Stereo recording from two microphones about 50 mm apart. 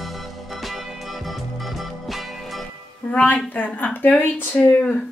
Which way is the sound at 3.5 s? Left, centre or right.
Left.